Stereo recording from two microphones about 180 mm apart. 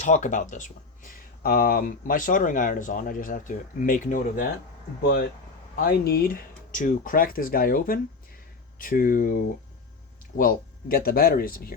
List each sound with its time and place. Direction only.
0.0 s speech: 40° left (ahead or behind)
5.8 s speech: 55° left (ahead or behind)